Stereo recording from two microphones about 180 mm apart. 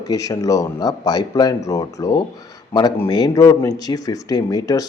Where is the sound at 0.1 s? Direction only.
20° left (ahead or behind).